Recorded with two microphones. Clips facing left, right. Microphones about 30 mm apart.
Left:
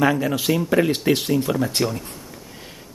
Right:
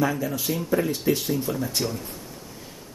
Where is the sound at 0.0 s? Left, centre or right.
Left.